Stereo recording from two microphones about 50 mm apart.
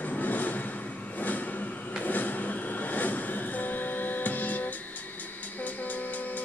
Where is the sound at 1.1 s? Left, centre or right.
Left.